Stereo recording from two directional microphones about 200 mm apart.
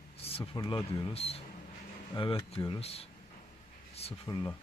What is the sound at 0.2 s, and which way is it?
Speech, 30° left (ahead or behind).